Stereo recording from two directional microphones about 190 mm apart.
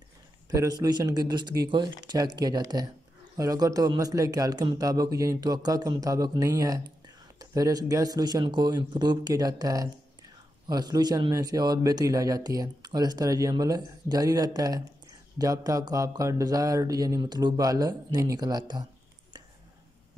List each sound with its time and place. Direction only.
0.5 s speech: 20° right (ahead or behind)